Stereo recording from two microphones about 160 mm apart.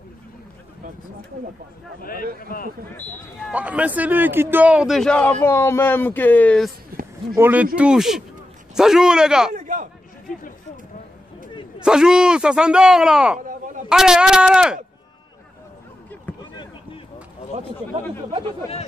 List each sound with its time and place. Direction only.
2.0 s a man's voice: 65° left (ahead or behind)
3.0 s a man's voice: 5° left (ahead or behind)
3.5 s a man's voice: 10° right (ahead or behind); by 6.7 s 5° left (ahead or behind)
6.9 s a sound: 70° right (ahead or behind)
7.3 s a man's voice: 15° right (ahead or behind)
9.5 s a sound: 55° right (ahead or behind)
11.8 s a man's voice: 5° right (ahead or behind)